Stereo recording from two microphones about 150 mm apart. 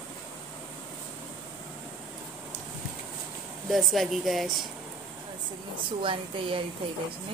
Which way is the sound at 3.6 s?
Centre (ahead or behind).